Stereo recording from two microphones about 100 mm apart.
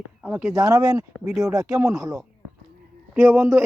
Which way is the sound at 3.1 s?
20° right (ahead or behind).